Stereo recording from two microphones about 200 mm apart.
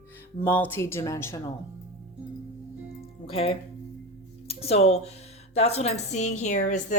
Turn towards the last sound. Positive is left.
turn(degrees=35)  # may be behind; listen again after turning